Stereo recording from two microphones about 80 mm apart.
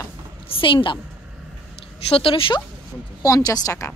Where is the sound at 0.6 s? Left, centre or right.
Left.